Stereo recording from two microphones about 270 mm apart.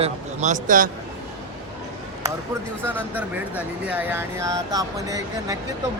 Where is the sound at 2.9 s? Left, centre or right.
Centre.